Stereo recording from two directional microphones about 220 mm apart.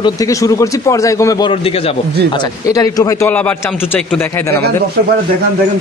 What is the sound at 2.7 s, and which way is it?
A man's voice, 15° left (ahead or behind).